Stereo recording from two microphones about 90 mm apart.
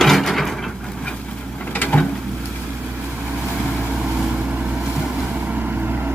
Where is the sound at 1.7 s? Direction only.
20° left (ahead or behind).